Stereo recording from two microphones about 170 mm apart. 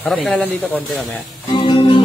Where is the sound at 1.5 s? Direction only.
30° left (ahead or behind).